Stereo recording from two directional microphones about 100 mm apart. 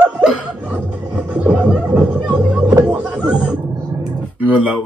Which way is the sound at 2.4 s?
15° right (ahead or behind).